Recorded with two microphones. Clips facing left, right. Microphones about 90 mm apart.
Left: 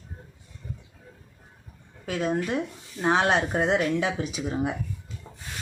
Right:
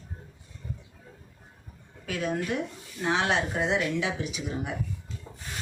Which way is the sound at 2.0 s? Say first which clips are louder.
Left 3 dB; 35° left (ahead or behind).